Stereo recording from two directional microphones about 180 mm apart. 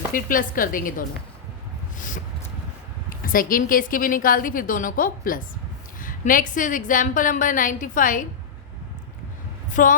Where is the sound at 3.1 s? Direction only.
50° left (ahead or behind).